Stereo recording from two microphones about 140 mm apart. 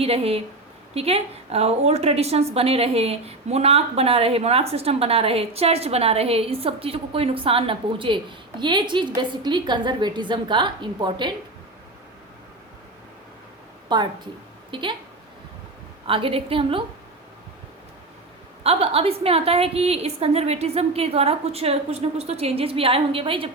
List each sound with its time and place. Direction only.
0.0 s a woman's voice: 45° right (ahead or behind)
13.9 s a woman's voice: 30° right (ahead or behind)
16.0 s a woman's voice: 40° right (ahead or behind)
18.6 s a woman's voice: 45° right (ahead or behind)